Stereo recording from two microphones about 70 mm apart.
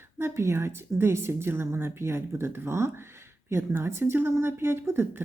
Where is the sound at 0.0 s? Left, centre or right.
Right.